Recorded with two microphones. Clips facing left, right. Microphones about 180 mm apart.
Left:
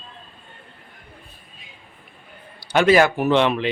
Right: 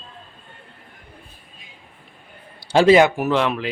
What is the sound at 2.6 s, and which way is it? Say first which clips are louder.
Speech: right 3 dB; 30° right (ahead or behind).